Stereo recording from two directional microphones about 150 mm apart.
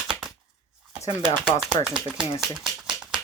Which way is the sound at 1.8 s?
5° right (ahead or behind).